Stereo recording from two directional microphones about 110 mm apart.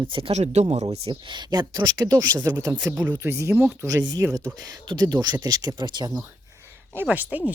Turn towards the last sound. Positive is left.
turn(degrees=-15)  # may be behind; listen again after turning